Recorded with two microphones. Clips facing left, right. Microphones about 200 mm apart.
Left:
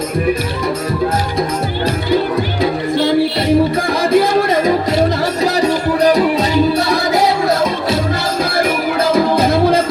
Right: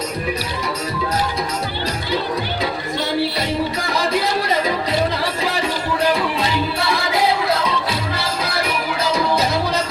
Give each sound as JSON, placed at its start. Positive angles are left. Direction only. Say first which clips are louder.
{"t": 4.0, "sound": "music", "louder": "left 9 dB", "side_deg": 50}